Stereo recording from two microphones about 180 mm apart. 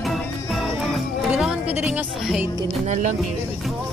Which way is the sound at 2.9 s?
45° right (ahead or behind).